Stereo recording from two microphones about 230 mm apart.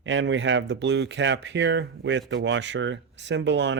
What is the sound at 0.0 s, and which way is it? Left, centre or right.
Speech, right.